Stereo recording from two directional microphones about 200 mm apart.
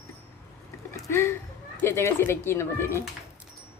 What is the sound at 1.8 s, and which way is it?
Speech, 15° left (ahead or behind).